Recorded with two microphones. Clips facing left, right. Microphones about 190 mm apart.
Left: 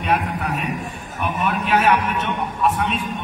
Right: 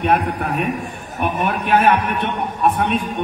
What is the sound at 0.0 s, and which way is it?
A man's voice, 55° right (ahead or behind).